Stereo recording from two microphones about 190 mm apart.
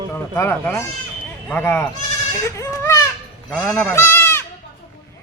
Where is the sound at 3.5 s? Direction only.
Centre (ahead or behind).